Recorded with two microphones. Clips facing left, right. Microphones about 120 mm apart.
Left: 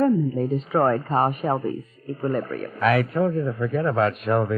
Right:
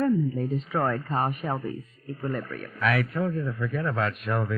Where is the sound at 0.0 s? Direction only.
35° left (ahead or behind).